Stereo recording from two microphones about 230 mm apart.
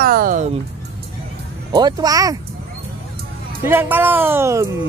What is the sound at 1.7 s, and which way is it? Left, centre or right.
Speech, centre.